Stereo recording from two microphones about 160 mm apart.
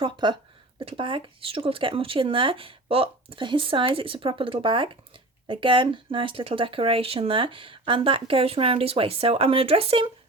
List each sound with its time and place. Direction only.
0.0 s speech: 30° right (ahead or behind)